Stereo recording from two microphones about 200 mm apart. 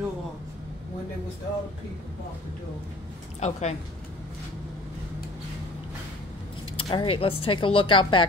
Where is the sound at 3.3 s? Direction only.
35° left (ahead or behind).